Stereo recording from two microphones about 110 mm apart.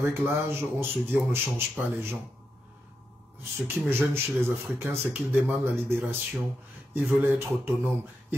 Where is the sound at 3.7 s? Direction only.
20° right (ahead or behind).